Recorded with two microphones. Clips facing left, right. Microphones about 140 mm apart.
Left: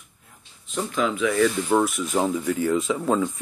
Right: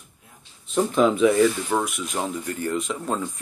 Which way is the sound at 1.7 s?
Centre (ahead or behind).